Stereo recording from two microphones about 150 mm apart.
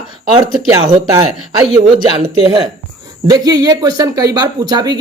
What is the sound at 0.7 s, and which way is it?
Speech, 25° right (ahead or behind).